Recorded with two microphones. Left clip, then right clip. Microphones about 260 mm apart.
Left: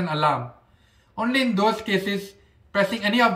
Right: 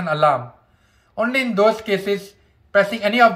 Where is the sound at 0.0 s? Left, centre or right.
Centre.